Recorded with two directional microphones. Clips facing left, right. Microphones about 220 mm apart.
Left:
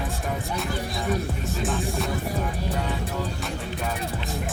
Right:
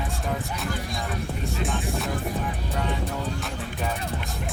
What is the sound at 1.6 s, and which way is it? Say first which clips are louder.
Music: left 3 dB; centre (ahead or behind).